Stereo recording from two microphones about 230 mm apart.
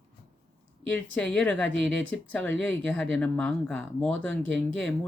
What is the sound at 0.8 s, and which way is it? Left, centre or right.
Speech, centre.